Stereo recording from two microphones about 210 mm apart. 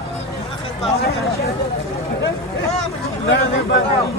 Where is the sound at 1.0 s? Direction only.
50° left (ahead or behind).